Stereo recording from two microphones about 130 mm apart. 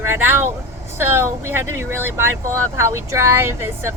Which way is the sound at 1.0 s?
20° right (ahead or behind).